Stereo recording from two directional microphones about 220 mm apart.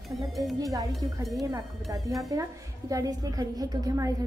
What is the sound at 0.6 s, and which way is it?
Speech, 15° right (ahead or behind).